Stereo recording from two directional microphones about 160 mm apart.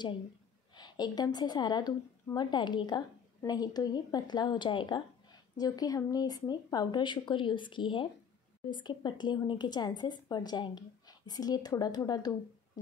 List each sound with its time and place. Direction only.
0.7 s speech: 25° left (ahead or behind)